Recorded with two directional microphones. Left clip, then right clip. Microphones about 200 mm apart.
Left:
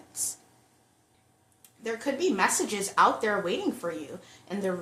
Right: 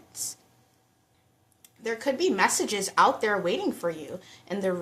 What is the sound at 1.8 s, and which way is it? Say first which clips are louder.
A woman's voice: right 2 dB; 15° right (ahead or behind).